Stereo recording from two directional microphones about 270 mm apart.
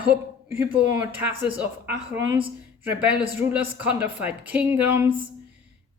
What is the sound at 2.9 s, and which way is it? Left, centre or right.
A woman's voice, centre.